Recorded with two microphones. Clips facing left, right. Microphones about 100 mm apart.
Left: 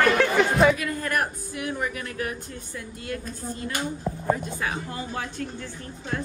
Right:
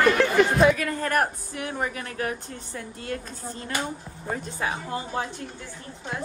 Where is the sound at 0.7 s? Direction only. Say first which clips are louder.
Right 2 dB; 40° right (ahead or behind).